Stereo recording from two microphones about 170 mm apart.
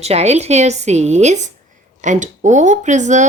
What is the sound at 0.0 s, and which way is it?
A woman's voice, 40° right (ahead or behind).